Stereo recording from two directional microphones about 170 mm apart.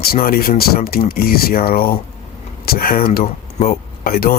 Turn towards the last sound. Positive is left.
turn(degrees=60)  # may be behind; listen again after turning